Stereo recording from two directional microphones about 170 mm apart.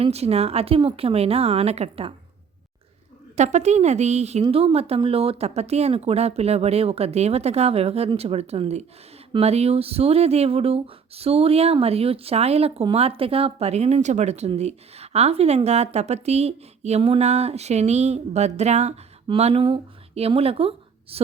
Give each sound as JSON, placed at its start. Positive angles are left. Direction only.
{"t": 0.0, "sound": "speech", "side_deg": -35}
{"t": 3.3, "sound": "speech", "side_deg": -45}